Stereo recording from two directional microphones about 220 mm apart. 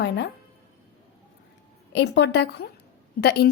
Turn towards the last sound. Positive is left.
turn(degrees=45)  # may be behind; listen again after turning